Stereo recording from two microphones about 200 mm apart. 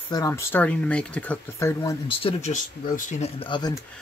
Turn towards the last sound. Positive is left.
turn(degrees=25)  # may be behind; listen again after turning